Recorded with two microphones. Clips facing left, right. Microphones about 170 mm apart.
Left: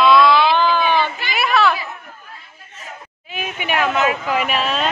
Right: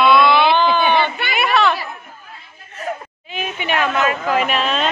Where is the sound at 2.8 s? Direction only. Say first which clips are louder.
Right 12 dB; 60° right (ahead or behind).